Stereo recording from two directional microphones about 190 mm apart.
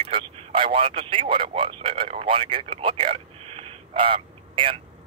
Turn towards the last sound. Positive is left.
turn(degrees=-30)  # may be behind; listen again after turning